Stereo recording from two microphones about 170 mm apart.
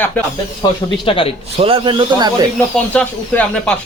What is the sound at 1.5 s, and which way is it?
Speech, 35° right (ahead or behind).